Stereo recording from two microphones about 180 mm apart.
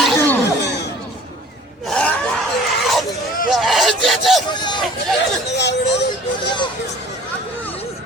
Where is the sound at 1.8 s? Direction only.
5° left (ahead or behind).